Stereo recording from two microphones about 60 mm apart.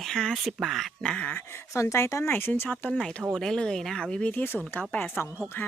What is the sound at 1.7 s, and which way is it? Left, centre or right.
Speech, left.